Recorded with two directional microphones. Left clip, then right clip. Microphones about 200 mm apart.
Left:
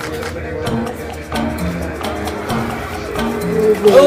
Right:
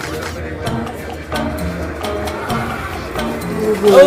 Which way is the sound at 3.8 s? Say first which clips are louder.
Even; centre (ahead or behind).